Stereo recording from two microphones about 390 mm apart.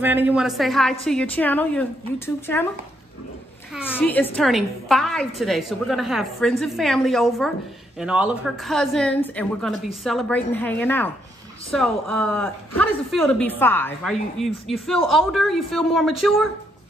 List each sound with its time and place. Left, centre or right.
0.0 s a woman's voice: centre
3.7 s a woman's voice: centre